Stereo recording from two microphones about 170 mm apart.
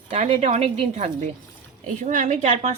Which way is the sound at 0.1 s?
40° right (ahead or behind).